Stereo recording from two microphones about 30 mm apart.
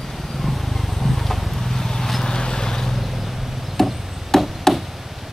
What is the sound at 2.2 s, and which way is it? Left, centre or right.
Vehicle, left.